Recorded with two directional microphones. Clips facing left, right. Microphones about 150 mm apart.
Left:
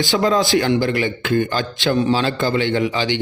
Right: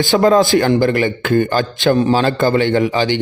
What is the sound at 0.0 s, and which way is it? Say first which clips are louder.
Speech: right 5 dB; 50° right (ahead or behind).